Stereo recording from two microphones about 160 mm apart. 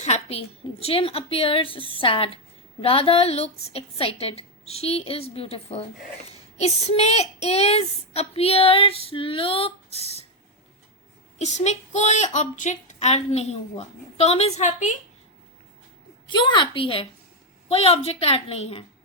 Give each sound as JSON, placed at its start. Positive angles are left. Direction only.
{"t": 0.0, "sound": "a woman's voice", "side_deg": 40}
{"t": 9.9, "sound": "speech", "side_deg": -40}
{"t": 11.3, "sound": "a woman's voice", "side_deg": 45}
{"t": 16.2, "sound": "a woman's voice", "side_deg": 30}